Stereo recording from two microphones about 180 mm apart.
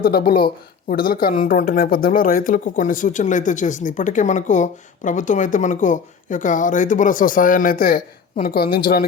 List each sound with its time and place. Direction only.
0.0 s speech: 60° left (ahead or behind)